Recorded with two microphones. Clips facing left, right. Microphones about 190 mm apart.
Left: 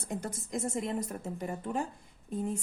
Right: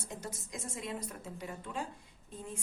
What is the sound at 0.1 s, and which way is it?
A woman's voice, 55° left (ahead or behind).